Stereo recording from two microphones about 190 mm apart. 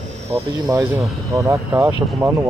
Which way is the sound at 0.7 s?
15° right (ahead or behind).